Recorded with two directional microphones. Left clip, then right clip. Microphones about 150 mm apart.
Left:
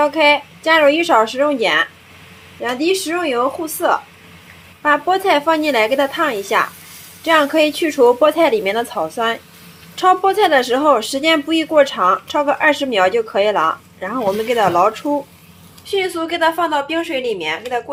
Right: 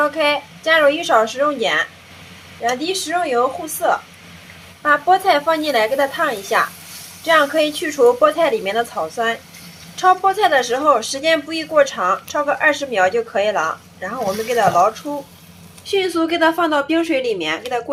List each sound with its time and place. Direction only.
0.0 s speech: 25° left (ahead or behind)
4.8 s speech: 25° left (ahead or behind)
15.9 s speech: centre (ahead or behind)